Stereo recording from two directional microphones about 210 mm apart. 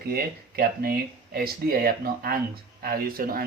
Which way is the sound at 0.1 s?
45° right (ahead or behind).